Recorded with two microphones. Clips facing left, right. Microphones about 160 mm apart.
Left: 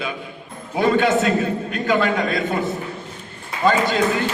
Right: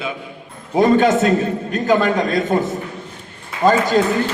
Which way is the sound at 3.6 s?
45° right (ahead or behind).